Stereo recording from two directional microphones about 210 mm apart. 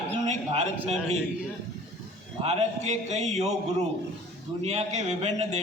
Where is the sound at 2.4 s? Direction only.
30° right (ahead or behind).